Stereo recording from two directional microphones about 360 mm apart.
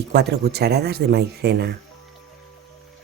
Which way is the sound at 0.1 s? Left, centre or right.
Right.